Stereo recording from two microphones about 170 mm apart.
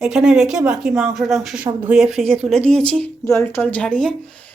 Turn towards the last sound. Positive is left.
turn(degrees=5)  # may be behind; listen again after turning